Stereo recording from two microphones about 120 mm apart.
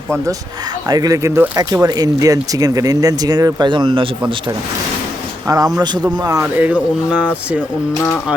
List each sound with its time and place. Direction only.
0.9 s speech: 30° right (ahead or behind)
5.5 s speech: 30° right (ahead or behind)
6.4 s speech: 10° right (ahead or behind)